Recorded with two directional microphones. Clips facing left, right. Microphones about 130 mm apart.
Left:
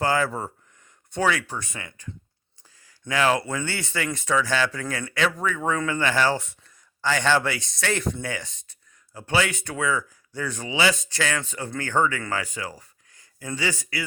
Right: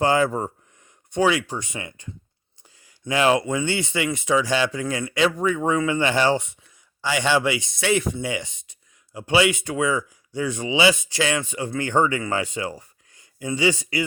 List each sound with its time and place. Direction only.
0.0 s speech: 20° right (ahead or behind)
3.1 s speech: 20° right (ahead or behind)